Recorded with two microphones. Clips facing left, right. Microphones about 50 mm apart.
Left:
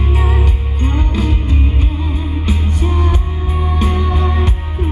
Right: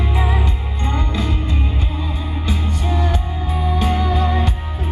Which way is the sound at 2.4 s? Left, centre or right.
Centre.